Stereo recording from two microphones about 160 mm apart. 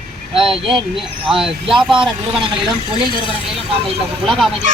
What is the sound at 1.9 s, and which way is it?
Speech, 30° right (ahead or behind).